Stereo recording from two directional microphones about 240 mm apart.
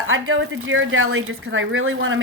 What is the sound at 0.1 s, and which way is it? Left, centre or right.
Speech, right.